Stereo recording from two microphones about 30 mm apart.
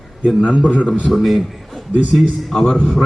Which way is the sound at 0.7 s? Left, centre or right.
Left.